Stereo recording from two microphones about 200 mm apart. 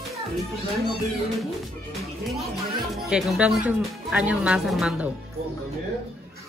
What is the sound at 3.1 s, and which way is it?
Speech, 5° right (ahead or behind).